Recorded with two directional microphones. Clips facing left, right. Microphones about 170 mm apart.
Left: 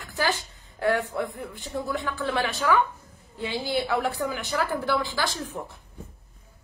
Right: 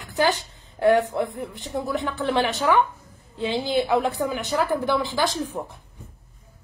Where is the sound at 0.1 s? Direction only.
20° right (ahead or behind).